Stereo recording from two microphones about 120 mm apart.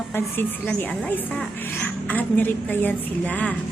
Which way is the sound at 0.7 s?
10° left (ahead or behind).